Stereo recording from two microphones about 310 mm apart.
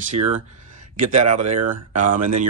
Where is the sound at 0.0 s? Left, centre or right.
Right.